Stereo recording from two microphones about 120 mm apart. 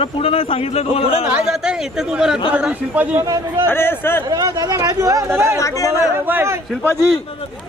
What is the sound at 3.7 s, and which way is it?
Speech, 20° left (ahead or behind).